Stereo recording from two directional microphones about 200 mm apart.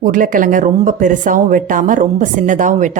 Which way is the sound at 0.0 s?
40° right (ahead or behind).